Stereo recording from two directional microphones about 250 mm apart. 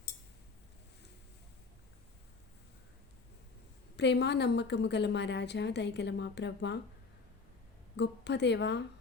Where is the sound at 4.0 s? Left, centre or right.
Left.